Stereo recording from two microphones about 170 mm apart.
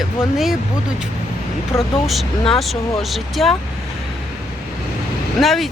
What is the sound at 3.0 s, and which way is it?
Speech, centre (ahead or behind).